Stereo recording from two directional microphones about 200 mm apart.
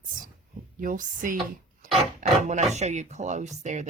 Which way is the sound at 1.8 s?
40° right (ahead or behind).